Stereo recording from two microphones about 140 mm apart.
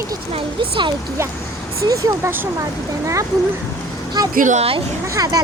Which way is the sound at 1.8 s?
25° right (ahead or behind).